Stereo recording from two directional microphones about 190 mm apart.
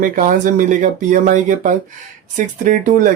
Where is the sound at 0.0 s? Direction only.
45° right (ahead or behind).